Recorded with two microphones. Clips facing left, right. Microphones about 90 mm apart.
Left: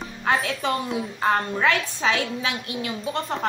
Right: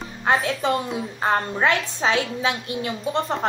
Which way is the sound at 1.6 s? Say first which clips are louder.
Right 1 dB; 25° right (ahead or behind).